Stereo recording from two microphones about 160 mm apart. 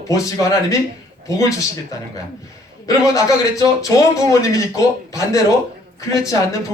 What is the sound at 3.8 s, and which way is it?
Speech, 20° left (ahead or behind).